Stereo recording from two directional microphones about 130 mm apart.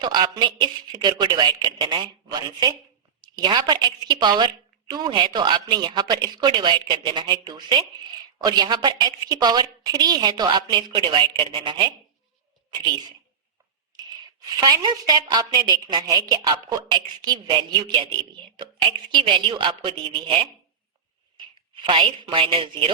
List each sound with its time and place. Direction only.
0.0 s a woman's voice: 35° right (ahead or behind)
14.5 s a woman's voice: 30° right (ahead or behind)
21.8 s a woman's voice: 40° right (ahead or behind)